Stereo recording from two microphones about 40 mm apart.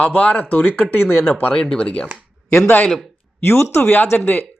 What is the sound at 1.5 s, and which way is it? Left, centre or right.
Speech, left.